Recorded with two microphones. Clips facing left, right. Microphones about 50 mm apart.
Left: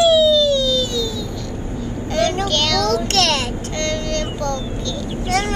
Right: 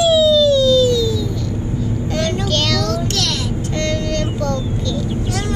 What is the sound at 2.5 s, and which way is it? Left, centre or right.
Child singing, centre.